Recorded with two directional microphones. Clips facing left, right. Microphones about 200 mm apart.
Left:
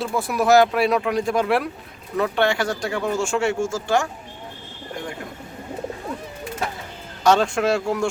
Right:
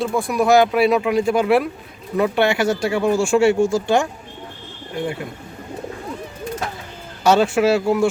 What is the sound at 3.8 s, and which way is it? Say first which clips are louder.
Speech: right 3 dB; 20° right (ahead or behind).